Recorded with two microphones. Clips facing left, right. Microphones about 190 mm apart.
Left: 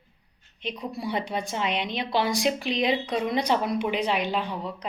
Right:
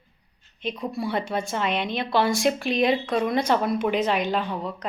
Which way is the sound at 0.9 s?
15° left (ahead or behind).